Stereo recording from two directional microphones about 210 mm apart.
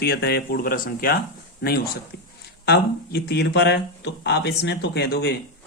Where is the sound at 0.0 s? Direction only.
50° left (ahead or behind).